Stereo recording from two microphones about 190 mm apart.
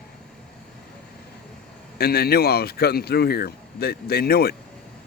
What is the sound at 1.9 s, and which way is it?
Speech, 55° left (ahead or behind).